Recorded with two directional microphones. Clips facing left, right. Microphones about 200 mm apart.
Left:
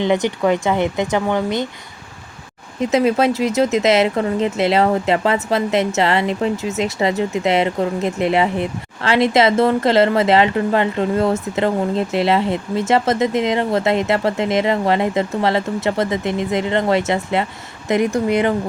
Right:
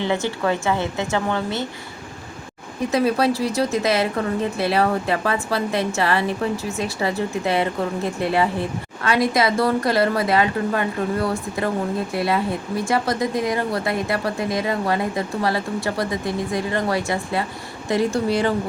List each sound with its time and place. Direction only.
0.0 s a woman's voice: 15° left (ahead or behind)
2.8 s a woman's voice: 20° left (ahead or behind)